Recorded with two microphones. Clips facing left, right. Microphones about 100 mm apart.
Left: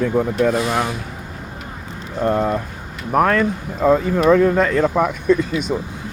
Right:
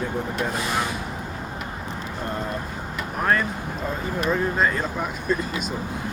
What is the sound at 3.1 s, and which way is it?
Speech, 90° left.